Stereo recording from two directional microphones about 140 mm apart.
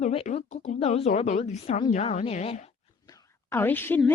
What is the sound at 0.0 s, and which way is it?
Speech, 45° left (ahead or behind).